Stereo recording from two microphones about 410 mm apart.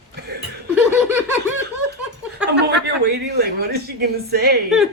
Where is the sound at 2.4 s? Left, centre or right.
Right.